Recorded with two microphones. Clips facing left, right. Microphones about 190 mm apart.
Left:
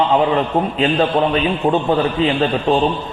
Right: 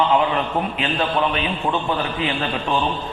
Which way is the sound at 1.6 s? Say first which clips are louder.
Left 8 dB; 40° left (ahead or behind).